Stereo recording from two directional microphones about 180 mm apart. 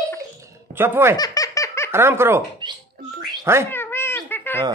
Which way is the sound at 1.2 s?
20° left (ahead or behind).